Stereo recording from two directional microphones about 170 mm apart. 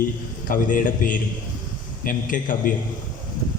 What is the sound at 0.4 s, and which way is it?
A man's voice, 50° left (ahead or behind).